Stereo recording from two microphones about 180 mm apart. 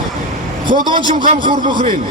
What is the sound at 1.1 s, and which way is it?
Speech, 45° right (ahead or behind).